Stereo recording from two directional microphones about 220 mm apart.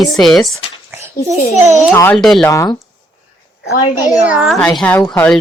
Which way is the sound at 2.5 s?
15° left (ahead or behind).